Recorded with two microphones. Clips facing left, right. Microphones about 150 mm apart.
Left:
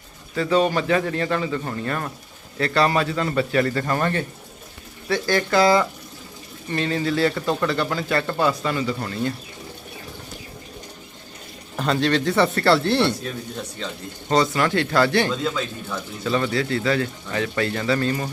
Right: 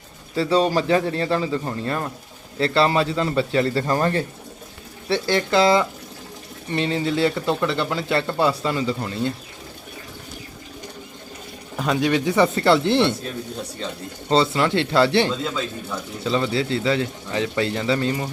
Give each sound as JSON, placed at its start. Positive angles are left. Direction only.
{"t": 0.3, "sound": "speech", "side_deg": -30}
{"t": 11.8, "sound": "speech", "side_deg": -10}
{"t": 14.3, "sound": "speech", "side_deg": -25}